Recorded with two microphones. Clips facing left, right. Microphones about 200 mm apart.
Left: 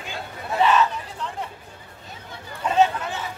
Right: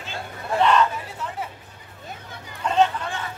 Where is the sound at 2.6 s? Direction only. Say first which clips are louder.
Left 1 dB; 5° left (ahead or behind).